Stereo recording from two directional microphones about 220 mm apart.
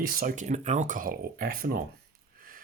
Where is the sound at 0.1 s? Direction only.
40° right (ahead or behind).